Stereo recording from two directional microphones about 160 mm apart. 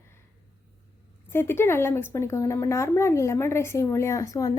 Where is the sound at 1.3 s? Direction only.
15° left (ahead or behind).